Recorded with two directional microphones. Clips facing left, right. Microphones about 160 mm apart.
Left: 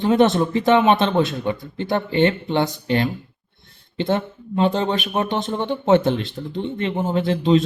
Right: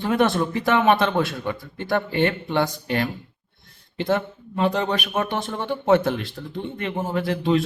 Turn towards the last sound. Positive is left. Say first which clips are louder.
# left 4 dB
turn(degrees=25)  # may be behind; listen again after turning